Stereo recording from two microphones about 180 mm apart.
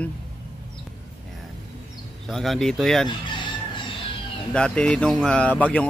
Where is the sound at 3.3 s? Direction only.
25° left (ahead or behind).